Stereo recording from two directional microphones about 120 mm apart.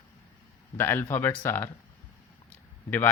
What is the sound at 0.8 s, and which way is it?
Speech, 20° left (ahead or behind).